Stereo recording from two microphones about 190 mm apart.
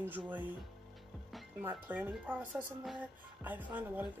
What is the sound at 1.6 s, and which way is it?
Speech, 10° right (ahead or behind).